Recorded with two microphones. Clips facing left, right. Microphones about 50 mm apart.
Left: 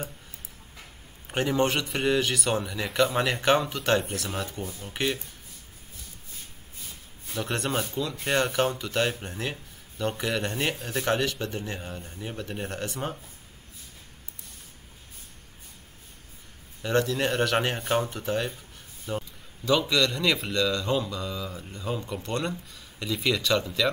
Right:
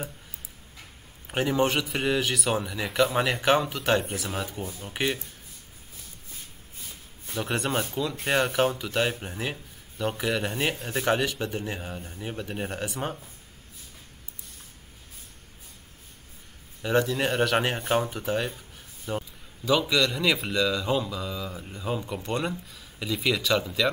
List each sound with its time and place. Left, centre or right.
1.2 s speech: centre
7.2 s speech: centre
16.8 s speech: centre